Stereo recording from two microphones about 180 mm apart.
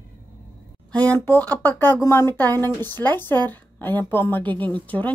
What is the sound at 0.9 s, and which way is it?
Speech, 10° left (ahead or behind).